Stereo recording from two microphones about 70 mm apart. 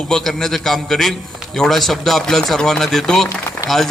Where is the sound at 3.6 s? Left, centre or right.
Left.